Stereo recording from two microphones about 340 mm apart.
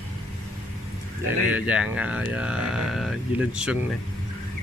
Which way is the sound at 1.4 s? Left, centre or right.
Centre.